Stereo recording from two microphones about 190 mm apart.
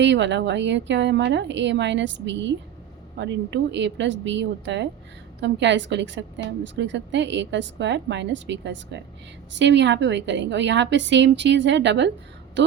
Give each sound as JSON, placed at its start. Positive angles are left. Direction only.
{"t": 0.0, "sound": "a woman's voice", "side_deg": -70}